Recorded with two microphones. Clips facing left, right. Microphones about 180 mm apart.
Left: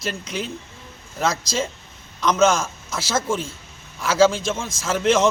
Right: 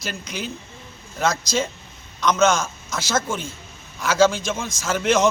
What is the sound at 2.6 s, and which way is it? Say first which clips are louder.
Speech: even; 30° left (ahead or behind).